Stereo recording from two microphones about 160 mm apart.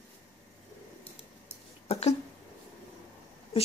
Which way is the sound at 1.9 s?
40° left (ahead or behind).